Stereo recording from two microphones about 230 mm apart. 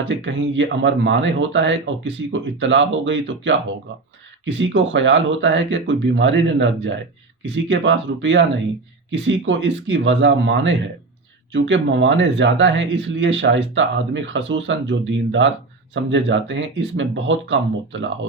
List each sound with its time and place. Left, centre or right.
0.1 s speech: right